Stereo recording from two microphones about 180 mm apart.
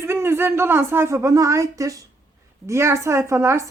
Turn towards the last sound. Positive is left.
turn(degrees=-15)  # may be behind; listen again after turning